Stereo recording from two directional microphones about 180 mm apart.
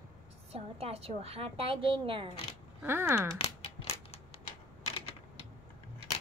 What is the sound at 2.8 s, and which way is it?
Speech, 15° right (ahead or behind).